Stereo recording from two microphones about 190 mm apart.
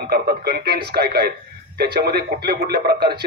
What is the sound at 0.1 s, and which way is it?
A man's voice, 55° right (ahead or behind).